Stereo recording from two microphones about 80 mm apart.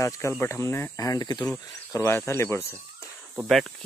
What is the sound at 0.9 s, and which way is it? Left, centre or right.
Speech, left.